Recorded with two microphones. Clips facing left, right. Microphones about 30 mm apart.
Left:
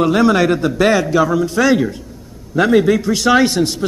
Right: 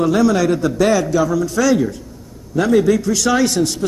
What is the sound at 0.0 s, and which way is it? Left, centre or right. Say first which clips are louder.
A man's voice: left 2 dB; left.